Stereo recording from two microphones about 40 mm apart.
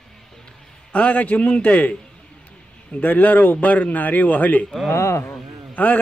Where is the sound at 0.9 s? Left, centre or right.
Left.